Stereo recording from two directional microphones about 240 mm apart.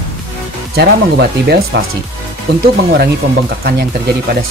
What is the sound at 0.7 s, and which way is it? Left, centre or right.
Speech, right.